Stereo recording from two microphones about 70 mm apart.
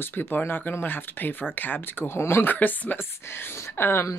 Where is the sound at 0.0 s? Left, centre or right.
Left.